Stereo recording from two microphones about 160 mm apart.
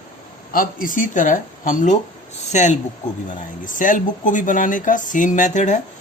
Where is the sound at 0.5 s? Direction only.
60° left (ahead or behind).